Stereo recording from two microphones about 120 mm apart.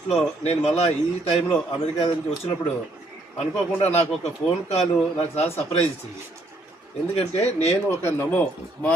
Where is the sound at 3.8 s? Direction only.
65° left (ahead or behind).